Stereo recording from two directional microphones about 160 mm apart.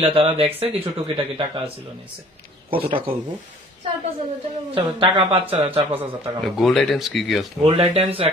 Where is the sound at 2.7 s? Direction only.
35° right (ahead or behind).